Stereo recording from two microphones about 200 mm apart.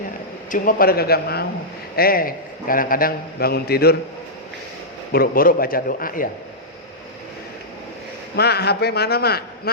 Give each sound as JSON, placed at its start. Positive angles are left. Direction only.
{"t": 0.5, "sound": "a man's voice", "side_deg": 45}
{"t": 5.1, "sound": "a man's voice", "side_deg": 45}
{"t": 8.4, "sound": "a man's voice", "side_deg": 55}